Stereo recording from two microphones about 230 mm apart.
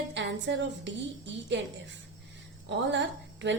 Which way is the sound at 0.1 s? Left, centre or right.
Right.